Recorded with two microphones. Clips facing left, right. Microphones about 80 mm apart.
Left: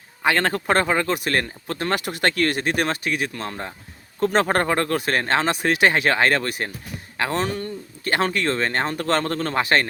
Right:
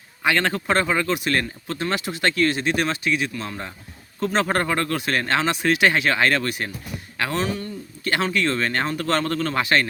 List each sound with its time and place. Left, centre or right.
0.3 s speech: left